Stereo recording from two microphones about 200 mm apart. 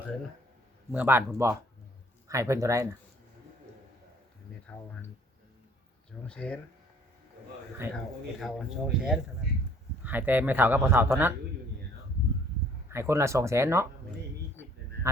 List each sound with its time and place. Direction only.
0.9 s a man's voice: 10° right (ahead or behind)
4.6 s a sound: 5° left (ahead or behind)
6.1 s speech: 5° left (ahead or behind)
7.8 s a man's voice: 10° right (ahead or behind)
12.9 s a man's voice: 15° right (ahead or behind)